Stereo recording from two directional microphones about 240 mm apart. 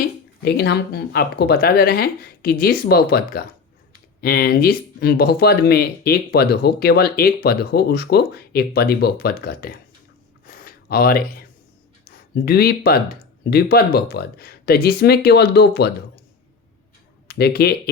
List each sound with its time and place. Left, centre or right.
0.0 s speech: left
10.4 s a sound: left
12.0 s speech: left
17.2 s speech: left